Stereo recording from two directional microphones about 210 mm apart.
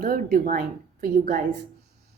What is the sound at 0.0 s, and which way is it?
A woman's voice, 45° right (ahead or behind).